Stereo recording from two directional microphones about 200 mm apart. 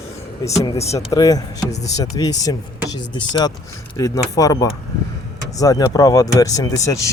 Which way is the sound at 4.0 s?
15° left (ahead or behind).